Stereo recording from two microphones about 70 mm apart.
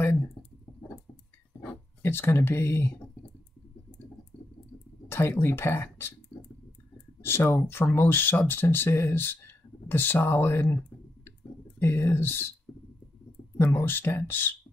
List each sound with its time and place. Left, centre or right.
2.0 s speech: left
5.0 s speech: left
7.2 s speech: left
11.8 s speech: left
13.6 s speech: left